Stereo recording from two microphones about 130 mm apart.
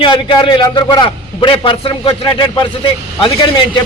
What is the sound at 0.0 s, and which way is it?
A man's voice, 40° left (ahead or behind).